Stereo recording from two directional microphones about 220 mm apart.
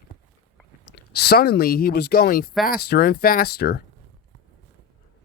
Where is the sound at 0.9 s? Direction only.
45° left (ahead or behind).